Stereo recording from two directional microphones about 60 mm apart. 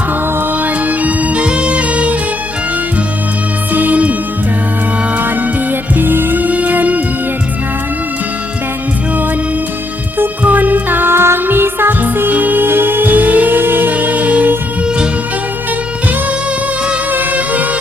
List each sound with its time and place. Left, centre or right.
0.6 s music: right
3.7 s music: right
5.1 s music: right
10.4 s music: right
17.1 s music: right